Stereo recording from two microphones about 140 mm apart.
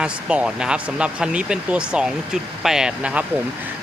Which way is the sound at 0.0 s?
5° right (ahead or behind).